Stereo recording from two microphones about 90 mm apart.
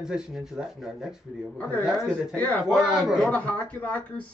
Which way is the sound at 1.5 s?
15° left (ahead or behind).